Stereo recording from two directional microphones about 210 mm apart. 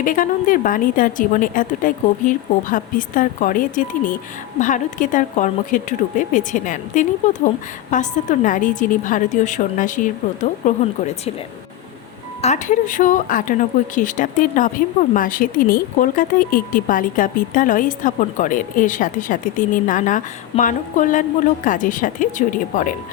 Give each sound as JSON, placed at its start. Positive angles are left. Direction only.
{"t": 0.0, "sound": "speech", "side_deg": 40}
{"t": 12.4, "sound": "speech", "side_deg": 35}